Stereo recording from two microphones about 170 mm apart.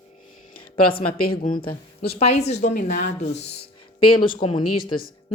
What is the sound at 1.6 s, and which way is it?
A woman's voice, 35° left (ahead or behind).